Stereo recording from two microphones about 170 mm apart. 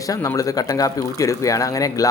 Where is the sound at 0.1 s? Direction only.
20° left (ahead or behind).